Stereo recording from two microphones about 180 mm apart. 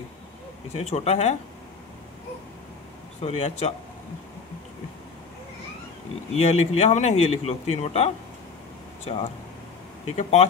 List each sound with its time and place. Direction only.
0.7 s a man's voice: 35° left (ahead or behind)
3.2 s a man's voice: 35° left (ahead or behind)
6.3 s a man's voice: 35° left (ahead or behind)
10.0 s a man's voice: 35° left (ahead or behind)